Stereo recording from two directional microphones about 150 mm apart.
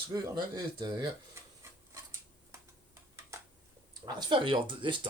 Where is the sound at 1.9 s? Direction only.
20° right (ahead or behind).